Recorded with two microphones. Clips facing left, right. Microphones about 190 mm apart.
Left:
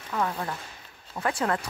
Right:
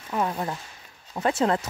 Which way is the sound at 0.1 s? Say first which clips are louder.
Right 2 dB; 20° right (ahead or behind).